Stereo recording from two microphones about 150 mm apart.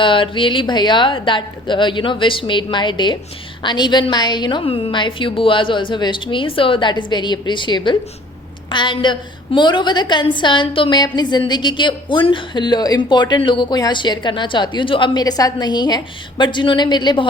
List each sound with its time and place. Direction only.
0.0 s a woman's voice: 35° left (ahead or behind)